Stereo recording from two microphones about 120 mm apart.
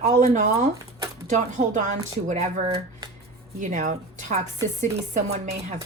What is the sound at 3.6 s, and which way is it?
Speech, 90° right.